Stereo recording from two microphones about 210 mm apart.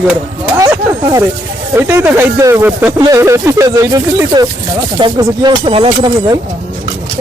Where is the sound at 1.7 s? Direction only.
10° right (ahead or behind).